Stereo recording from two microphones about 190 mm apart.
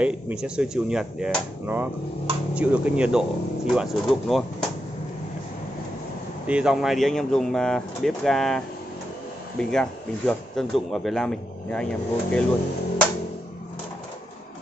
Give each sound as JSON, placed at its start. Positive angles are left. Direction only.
{"t": 0.0, "sound": "speech", "side_deg": -5}
{"t": 6.4, "sound": "speech", "side_deg": -5}